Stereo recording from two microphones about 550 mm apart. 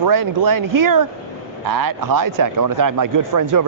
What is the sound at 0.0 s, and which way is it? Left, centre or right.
A man's voice, right.